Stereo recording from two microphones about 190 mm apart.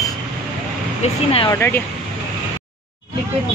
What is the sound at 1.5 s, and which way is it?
Speech, 15° left (ahead or behind).